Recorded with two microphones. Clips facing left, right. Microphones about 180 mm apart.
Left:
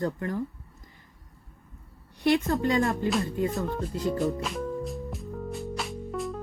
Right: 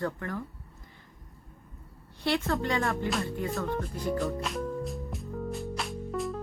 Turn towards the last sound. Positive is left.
turn(degrees=0)  # may be behind; listen again after turning